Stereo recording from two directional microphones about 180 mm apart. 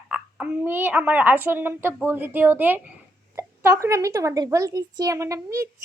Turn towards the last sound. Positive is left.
turn(degrees=-15)  # may be behind; listen again after turning